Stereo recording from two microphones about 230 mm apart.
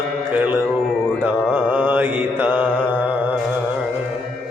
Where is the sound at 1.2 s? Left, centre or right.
Centre.